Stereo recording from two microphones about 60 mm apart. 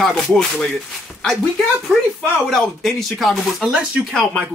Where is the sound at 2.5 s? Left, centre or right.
Centre.